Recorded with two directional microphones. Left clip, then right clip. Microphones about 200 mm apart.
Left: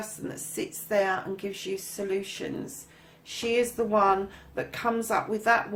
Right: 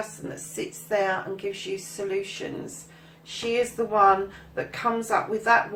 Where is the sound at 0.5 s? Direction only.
50° left (ahead or behind).